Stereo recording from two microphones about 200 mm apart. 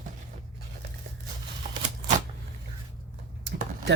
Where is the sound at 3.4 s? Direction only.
55° right (ahead or behind).